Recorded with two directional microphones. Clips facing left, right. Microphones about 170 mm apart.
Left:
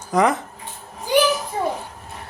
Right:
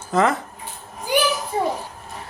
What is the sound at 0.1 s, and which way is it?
Speech, 15° left (ahead or behind).